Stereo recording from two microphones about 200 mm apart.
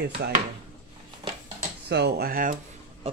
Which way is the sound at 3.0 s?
30° right (ahead or behind).